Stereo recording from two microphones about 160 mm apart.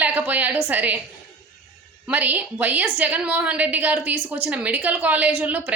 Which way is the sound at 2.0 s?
10° right (ahead or behind).